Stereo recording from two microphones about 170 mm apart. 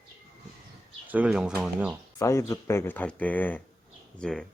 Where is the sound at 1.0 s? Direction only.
10° right (ahead or behind).